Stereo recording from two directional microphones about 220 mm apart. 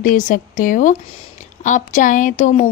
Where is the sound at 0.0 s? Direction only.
35° left (ahead or behind).